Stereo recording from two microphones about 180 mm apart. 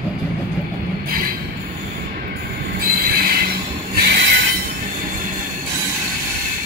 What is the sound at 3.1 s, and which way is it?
Train, 60° right (ahead or behind).